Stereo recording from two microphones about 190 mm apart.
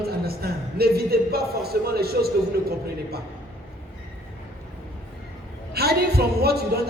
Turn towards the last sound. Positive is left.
turn(degrees=-55)  # may be behind; listen again after turning